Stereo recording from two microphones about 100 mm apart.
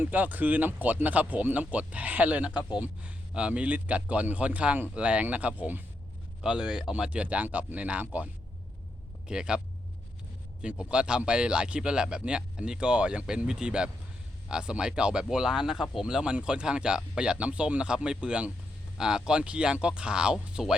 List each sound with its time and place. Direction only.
0.0 s speech: 15° right (ahead or behind)
2.6 s speech: 45° left (ahead or behind)
2.8 s speech: 10° right (ahead or behind)
10.6 s speech: 10° right (ahead or behind)